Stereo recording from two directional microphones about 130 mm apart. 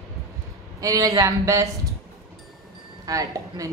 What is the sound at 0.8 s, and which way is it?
Speech, 25° right (ahead or behind).